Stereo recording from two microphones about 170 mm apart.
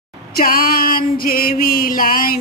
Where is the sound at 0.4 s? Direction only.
60° left (ahead or behind).